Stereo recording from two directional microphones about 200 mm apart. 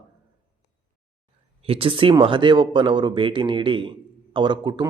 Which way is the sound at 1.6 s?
30° right (ahead or behind).